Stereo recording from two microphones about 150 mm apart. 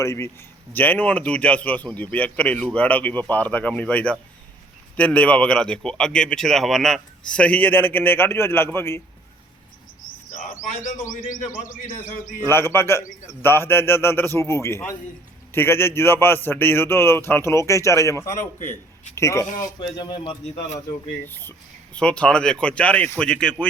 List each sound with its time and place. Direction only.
0.0 s speech: 20° left (ahead or behind)
10.5 s speech: 55° left (ahead or behind)
12.5 s speech: 15° left (ahead or behind)
18.6 s speech: 55° left (ahead or behind)
19.1 s speech: 20° left (ahead or behind)
19.8 s speech: 30° left (ahead or behind)
21.2 s speech: 15° left (ahead or behind)